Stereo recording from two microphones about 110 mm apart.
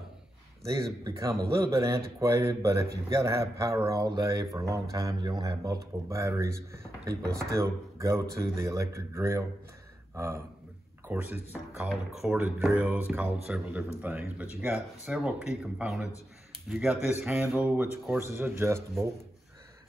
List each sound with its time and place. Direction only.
0.8 s speech: 35° right (ahead or behind)
11.1 s speech: 15° right (ahead or behind)
11.9 s speech: centre (ahead or behind)
12.4 s speech: 15° right (ahead or behind)
17.6 s speech: 15° right (ahead or behind)